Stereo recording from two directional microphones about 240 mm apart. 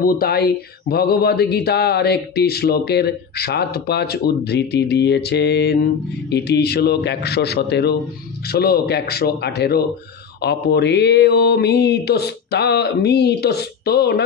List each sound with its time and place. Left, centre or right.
0.0 s mantra: left